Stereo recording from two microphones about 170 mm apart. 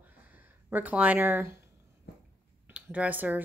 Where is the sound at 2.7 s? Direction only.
10° right (ahead or behind).